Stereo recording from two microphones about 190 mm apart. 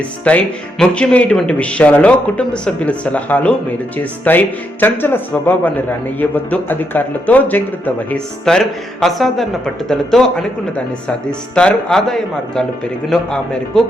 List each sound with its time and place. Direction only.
0.3 s speech: 5° left (ahead or behind)
11.3 s speech: 5° left (ahead or behind)